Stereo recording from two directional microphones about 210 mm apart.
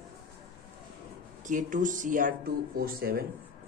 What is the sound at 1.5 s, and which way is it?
A man's voice, 35° right (ahead or behind).